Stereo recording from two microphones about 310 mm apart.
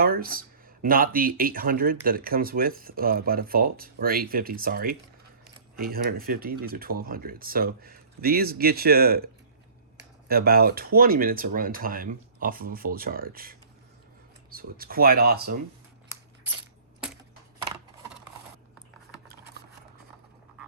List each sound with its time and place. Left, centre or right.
0.0 s speech: right